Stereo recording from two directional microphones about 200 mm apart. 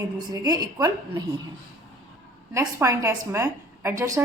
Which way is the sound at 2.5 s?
15° right (ahead or behind).